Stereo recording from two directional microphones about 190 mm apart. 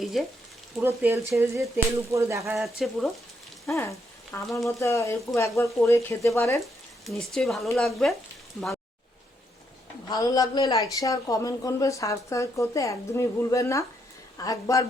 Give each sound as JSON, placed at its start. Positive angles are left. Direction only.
{"t": 0.0, "sound": "frying", "side_deg": 0}
{"t": 0.8, "sound": "speech", "side_deg": -10}
{"t": 2.6, "sound": "speech", "side_deg": 0}
{"t": 3.8, "sound": "speech", "side_deg": 15}
{"t": 7.0, "sound": "speech", "side_deg": 0}
{"t": 10.1, "sound": "a woman's voice", "side_deg": 20}